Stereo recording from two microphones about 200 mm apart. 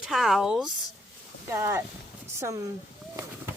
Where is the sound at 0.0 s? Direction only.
Centre (ahead or behind).